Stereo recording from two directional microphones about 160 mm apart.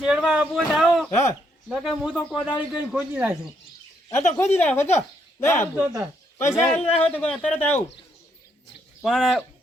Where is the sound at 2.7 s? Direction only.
5° right (ahead or behind).